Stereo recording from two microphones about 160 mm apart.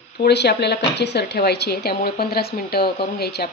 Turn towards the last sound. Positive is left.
turn(degrees=80)